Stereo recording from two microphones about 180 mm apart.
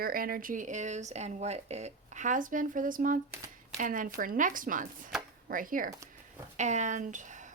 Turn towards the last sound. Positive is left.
turn(degrees=-45)  # may be behind; listen again after turning